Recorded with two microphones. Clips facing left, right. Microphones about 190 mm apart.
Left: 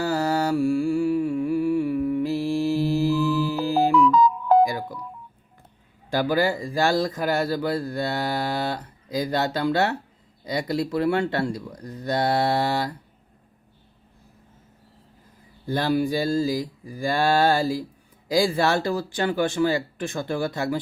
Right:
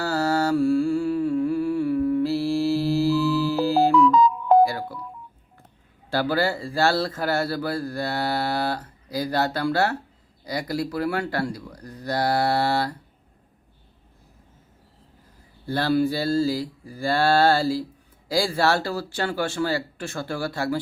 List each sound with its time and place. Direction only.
0.0 s music: 15° left (ahead or behind)
4.6 s telephone dialing: 15° left (ahead or behind)
6.1 s speech: 15° left (ahead or behind)
15.6 s speech: 15° left (ahead or behind)